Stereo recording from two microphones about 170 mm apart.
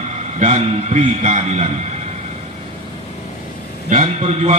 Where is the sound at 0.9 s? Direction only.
40° right (ahead or behind).